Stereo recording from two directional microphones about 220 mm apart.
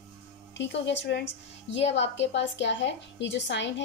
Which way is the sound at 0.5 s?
55° left (ahead or behind).